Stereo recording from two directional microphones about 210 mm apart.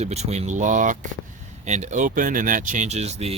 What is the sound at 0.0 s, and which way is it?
Speech, 30° right (ahead or behind).